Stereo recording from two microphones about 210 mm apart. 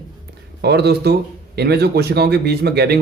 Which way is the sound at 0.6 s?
50° right (ahead or behind).